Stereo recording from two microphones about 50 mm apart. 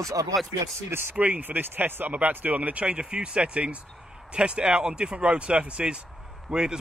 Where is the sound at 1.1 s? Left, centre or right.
Right.